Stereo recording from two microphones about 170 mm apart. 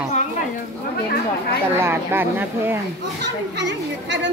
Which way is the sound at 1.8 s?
15° right (ahead or behind).